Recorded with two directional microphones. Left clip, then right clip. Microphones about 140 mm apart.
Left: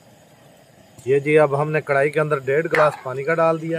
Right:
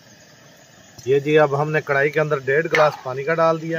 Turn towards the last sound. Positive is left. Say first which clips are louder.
# even
turn(degrees=30)  # may be behind; listen again after turning